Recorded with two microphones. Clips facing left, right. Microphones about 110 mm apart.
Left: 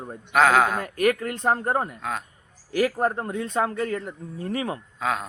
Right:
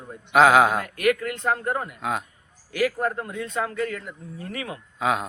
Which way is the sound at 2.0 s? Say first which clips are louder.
Right 3 dB; 10° right (ahead or behind).